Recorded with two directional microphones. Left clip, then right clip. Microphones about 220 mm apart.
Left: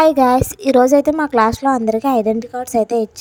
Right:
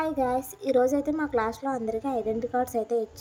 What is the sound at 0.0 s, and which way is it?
A woman's voice, 45° left (ahead or behind).